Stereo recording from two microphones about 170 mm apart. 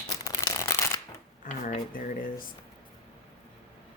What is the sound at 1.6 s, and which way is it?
Speech, 50° left (ahead or behind).